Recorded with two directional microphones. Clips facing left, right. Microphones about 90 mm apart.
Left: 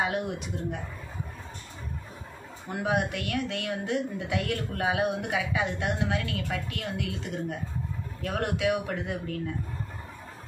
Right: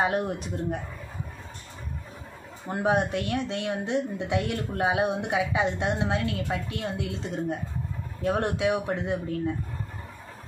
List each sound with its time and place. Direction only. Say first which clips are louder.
0.0 s speech: right 3 dB; 35° right (ahead or behind)
2.7 s speech: right 4 dB; 30° right (ahead or behind)